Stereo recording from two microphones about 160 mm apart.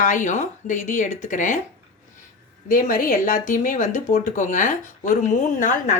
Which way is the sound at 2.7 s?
60° left (ahead or behind).